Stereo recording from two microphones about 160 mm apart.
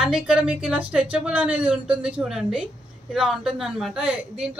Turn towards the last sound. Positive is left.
turn(degrees=-5)  # may be behind; listen again after turning